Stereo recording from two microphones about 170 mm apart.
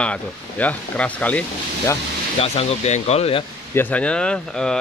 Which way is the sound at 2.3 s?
35° left (ahead or behind).